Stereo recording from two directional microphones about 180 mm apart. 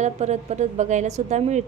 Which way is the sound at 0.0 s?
40° right (ahead or behind).